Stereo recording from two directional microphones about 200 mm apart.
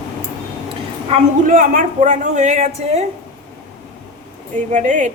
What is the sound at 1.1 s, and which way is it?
A man's voice, 40° right (ahead or behind).